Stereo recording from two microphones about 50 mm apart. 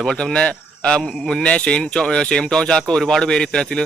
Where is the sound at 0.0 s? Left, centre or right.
Centre.